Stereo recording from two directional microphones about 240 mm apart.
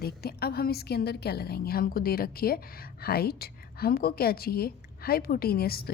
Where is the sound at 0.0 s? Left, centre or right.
Left.